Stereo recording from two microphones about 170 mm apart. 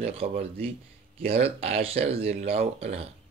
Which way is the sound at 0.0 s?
35° right (ahead or behind).